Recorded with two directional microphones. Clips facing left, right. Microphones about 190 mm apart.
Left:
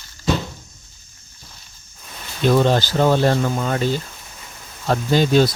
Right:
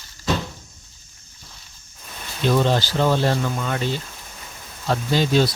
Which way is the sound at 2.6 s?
50° left (ahead or behind).